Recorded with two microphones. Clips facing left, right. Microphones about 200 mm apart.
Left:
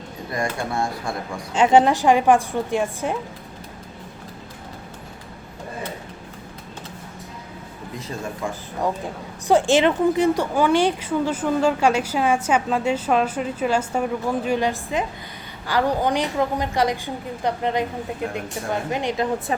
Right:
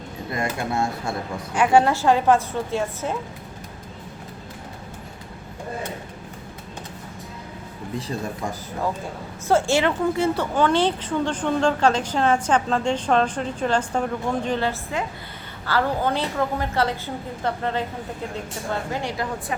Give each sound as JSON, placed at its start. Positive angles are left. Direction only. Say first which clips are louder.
{"t": 0.3, "sound": "speech", "louder": "even", "side_deg": -25}
{"t": 1.5, "sound": "a woman's voice", "louder": "left 2 dB", "side_deg": 20}
{"t": 9.5, "sound": "a woman's voice", "louder": "left 3 dB", "side_deg": 15}